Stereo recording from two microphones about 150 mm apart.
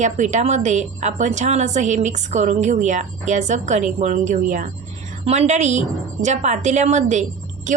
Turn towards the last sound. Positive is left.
turn(degrees=-55)  # may be behind; listen again after turning